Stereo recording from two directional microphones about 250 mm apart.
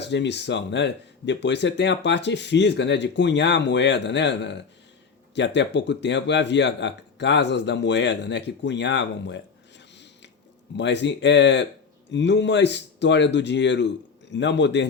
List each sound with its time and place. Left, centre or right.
0.0 s speech: left
10.8 s speech: left